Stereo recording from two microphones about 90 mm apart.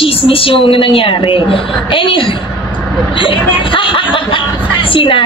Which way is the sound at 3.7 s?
70° left (ahead or behind).